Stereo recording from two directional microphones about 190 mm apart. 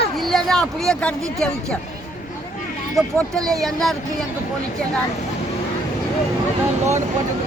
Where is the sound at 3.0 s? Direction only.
5° left (ahead or behind).